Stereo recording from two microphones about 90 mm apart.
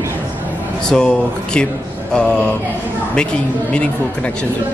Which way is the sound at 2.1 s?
10° left (ahead or behind).